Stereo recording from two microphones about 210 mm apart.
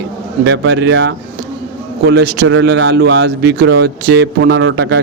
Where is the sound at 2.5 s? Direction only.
60° right (ahead or behind).